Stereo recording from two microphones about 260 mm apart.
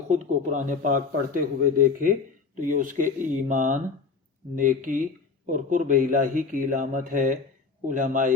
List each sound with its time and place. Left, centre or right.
0.1 s speech: right